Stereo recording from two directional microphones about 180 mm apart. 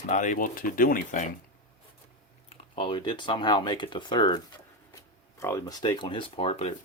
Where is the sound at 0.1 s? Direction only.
45° left (ahead or behind).